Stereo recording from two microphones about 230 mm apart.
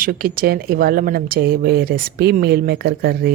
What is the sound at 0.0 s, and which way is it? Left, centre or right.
A woman's voice, right.